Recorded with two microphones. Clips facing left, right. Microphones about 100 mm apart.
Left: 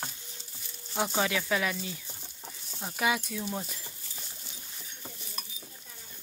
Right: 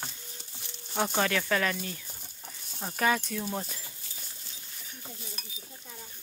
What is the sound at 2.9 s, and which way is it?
Speech, 10° left (ahead or behind).